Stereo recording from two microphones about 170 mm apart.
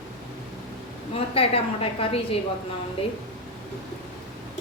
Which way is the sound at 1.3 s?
35° left (ahead or behind).